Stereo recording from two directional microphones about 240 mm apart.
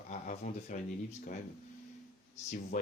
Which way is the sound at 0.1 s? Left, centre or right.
Left.